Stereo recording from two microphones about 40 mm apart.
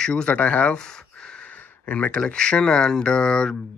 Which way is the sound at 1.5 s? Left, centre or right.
Left.